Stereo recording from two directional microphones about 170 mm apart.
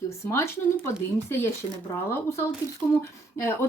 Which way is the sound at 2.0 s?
15° left (ahead or behind).